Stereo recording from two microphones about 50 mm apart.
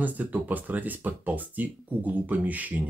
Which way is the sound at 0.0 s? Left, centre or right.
Right.